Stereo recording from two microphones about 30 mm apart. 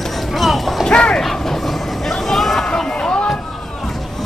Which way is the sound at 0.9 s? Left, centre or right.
Left.